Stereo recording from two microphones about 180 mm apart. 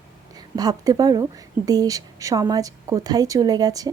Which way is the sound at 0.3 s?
20° right (ahead or behind).